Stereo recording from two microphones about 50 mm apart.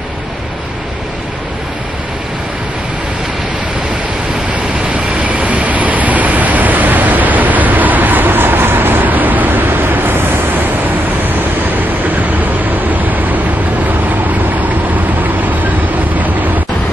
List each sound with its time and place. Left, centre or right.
4.9 s vehicle: right
12.9 s vehicle: right